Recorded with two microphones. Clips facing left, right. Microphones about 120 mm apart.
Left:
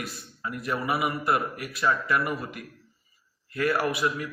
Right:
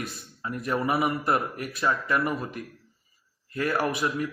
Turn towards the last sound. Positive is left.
turn(degrees=-40)  # may be behind; listen again after turning